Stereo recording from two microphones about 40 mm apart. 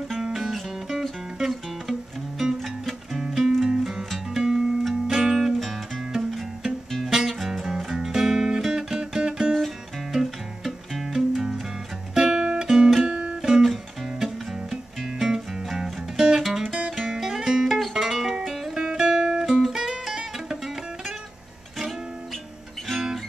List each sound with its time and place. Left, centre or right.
0.2 s music: centre
3.2 s music: centre
13.4 s guitar: centre
14.2 s music: centre